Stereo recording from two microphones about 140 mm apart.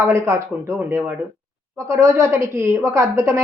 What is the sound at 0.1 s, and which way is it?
A woman's voice, 20° right (ahead or behind).